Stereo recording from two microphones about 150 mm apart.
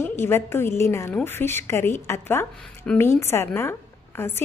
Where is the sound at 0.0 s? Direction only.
15° left (ahead or behind).